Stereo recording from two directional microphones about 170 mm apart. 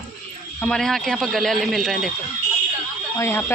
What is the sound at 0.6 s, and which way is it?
A man's voice, 5° left (ahead or behind).